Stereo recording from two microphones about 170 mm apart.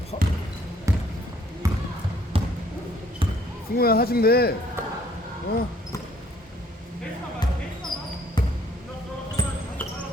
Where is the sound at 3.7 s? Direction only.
65° left (ahead or behind).